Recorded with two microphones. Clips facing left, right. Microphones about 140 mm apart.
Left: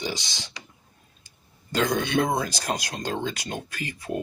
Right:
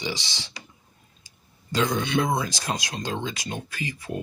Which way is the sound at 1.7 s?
50° left (ahead or behind).